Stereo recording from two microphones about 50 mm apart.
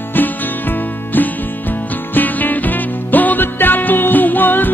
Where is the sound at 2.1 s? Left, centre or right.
Left.